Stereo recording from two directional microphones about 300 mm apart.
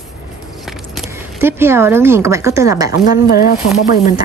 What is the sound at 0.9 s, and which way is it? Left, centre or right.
Speech, centre.